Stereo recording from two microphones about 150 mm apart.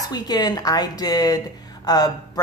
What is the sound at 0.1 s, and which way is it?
A woman's voice, 25° left (ahead or behind).